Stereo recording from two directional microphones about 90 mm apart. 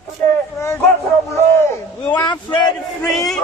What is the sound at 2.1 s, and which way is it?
Speech, 55° left (ahead or behind).